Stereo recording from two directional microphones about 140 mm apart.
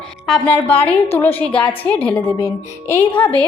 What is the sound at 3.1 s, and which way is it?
Speech, 40° left (ahead or behind).